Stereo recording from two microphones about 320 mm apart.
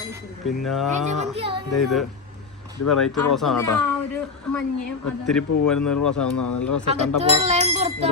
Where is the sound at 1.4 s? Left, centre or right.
Centre.